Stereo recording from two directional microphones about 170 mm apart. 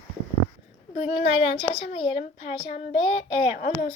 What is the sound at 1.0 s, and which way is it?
A woman's voice, 35° left (ahead or behind).